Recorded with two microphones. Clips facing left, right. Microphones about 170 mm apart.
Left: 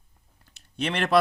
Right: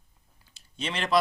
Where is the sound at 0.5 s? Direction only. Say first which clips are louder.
Left 5 dB; 60° left (ahead or behind).